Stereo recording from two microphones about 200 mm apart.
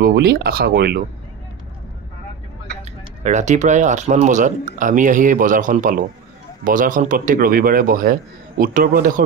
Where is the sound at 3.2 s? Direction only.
35° right (ahead or behind).